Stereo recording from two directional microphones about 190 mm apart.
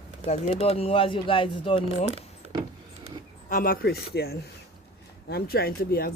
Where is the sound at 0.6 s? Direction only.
30° left (ahead or behind).